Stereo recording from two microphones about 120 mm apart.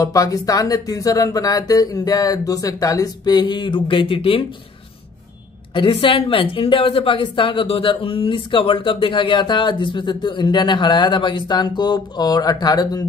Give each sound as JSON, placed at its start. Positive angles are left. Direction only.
{"t": 0.0, "sound": "speech", "side_deg": 30}
{"t": 5.8, "sound": "a woman's voice", "side_deg": 45}